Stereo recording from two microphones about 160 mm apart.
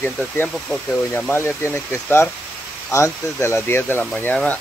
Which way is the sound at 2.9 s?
20° left (ahead or behind).